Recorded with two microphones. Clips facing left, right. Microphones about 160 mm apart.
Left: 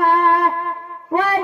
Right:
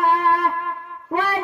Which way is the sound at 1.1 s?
45° left (ahead or behind).